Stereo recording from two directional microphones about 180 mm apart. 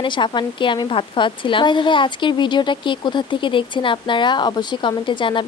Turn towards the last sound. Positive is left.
turn(degrees=25)  # may be behind; listen again after turning